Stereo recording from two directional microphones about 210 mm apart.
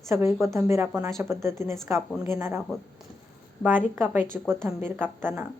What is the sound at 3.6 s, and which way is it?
A woman's voice, 5° right (ahead or behind).